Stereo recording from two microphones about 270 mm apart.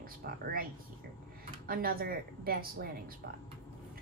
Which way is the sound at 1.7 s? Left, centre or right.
Right.